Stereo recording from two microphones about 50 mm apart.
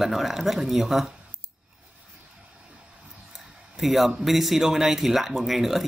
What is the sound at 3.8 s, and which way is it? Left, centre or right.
Speech, centre.